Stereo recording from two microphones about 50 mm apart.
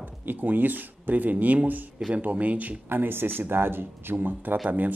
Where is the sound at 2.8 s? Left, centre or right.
Right.